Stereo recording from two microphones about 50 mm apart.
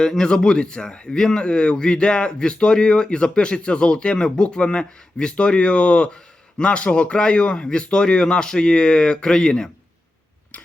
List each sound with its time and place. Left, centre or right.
0.0 s speech: centre